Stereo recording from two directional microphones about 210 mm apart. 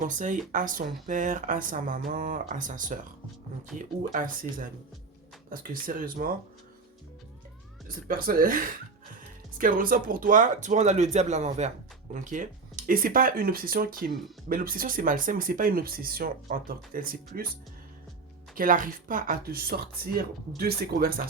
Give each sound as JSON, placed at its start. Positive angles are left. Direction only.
{"t": 0.0, "sound": "speech", "side_deg": -35}
{"t": 5.8, "sound": "speech", "side_deg": -40}
{"t": 7.9, "sound": "speech", "side_deg": -40}
{"t": 18.5, "sound": "speech", "side_deg": -40}